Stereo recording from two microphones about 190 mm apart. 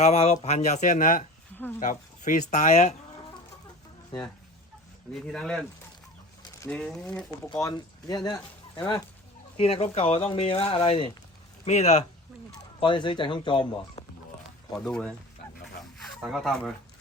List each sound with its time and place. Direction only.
0.0 s speech: 35° left (ahead or behind)
5.2 s speech: 5° left (ahead or behind)
6.4 s bird: 20° left (ahead or behind)
6.7 s speech: 5° left (ahead or behind)
7.5 s speech: 20° left (ahead or behind)
12.8 s speech: 25° left (ahead or behind)
14.8 s speech: 5° left (ahead or behind)